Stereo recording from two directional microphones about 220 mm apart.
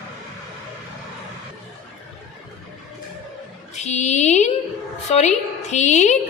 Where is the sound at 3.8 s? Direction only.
30° left (ahead or behind).